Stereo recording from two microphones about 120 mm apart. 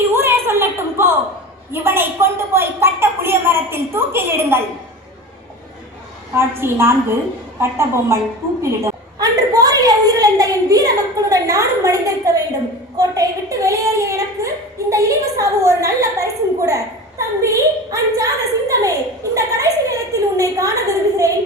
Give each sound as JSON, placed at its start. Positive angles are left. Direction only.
{"t": 0.1, "sound": "a sound", "side_deg": -20}
{"t": 1.7, "sound": "a child's voice", "side_deg": -20}
{"t": 6.3, "sound": "a child's voice", "side_deg": -20}